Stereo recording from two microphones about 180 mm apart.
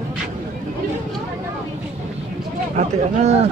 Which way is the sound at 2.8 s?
40° right (ahead or behind).